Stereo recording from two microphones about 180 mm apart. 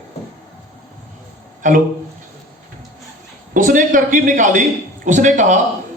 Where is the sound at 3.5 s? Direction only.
45° right (ahead or behind).